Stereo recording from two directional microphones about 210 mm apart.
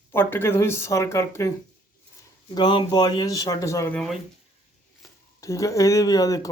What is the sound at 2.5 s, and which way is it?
Speech, 20° left (ahead or behind).